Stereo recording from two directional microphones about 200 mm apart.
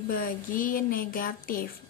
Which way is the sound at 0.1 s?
45° left (ahead or behind).